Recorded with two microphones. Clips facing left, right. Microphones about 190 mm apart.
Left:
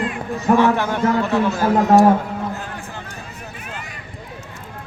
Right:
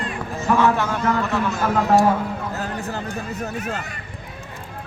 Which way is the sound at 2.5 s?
40° right (ahead or behind).